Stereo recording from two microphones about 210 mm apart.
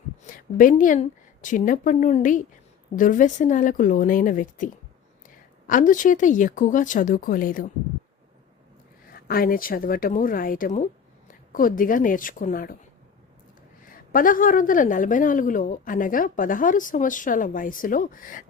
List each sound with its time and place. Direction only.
0.2 s a woman's voice: 40° left (ahead or behind)
9.1 s speech: 45° left (ahead or behind)
14.1 s speech: 40° left (ahead or behind)